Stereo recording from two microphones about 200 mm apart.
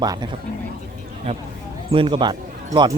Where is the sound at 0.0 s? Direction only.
20° right (ahead or behind).